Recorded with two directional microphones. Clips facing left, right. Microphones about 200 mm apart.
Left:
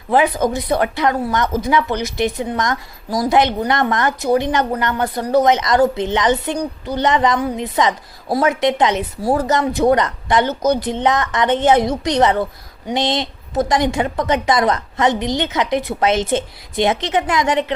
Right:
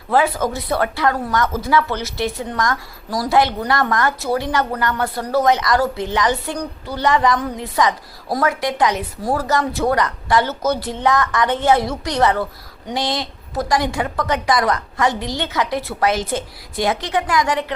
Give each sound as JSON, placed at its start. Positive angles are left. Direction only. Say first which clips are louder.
{"t": 0.1, "sound": "speech", "louder": "left 2 dB", "side_deg": 20}